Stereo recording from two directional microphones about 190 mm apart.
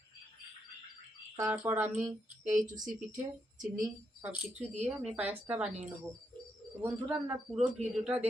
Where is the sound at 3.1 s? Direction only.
45° right (ahead or behind).